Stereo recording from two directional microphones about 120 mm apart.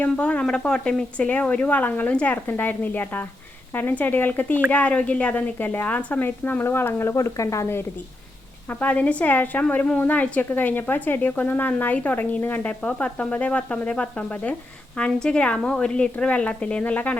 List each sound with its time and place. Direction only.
0.0 s a woman's voice: 10° left (ahead or behind)
8.8 s a woman's voice: 10° left (ahead or behind)